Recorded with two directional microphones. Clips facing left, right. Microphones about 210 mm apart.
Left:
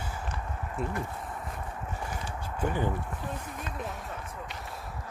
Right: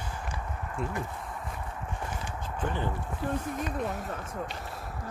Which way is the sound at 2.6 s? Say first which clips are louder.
Left 3 dB; 15° left (ahead or behind).